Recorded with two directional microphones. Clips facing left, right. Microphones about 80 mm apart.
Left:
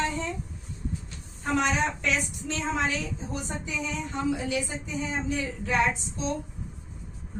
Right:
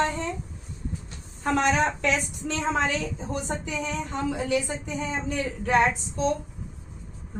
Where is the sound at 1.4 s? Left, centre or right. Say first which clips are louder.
Right 3 dB; right.